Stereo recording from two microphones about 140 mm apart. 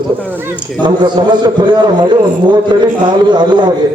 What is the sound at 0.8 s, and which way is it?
A man's voice, 35° right (ahead or behind).